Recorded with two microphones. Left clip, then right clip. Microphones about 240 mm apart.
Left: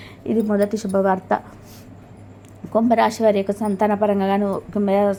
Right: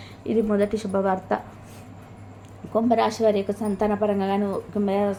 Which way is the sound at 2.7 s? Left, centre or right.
Left.